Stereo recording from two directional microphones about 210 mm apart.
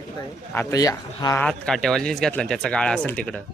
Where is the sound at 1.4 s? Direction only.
5° left (ahead or behind).